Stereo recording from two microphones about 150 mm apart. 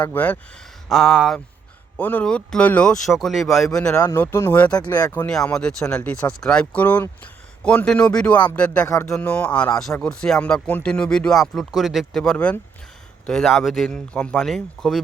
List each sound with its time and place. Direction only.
0.0 s speech: 10° left (ahead or behind)
0.9 s speech: centre (ahead or behind)
2.0 s speech: 10° left (ahead or behind)
3.9 s speech: 20° left (ahead or behind)
4.9 s speech: 20° left (ahead or behind)
5.2 s speech: 5° left (ahead or behind)